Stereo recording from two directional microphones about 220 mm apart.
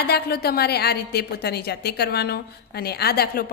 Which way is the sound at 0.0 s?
45° left (ahead or behind).